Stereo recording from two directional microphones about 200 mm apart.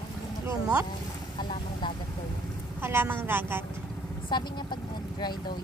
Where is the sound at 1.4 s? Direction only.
25° left (ahead or behind).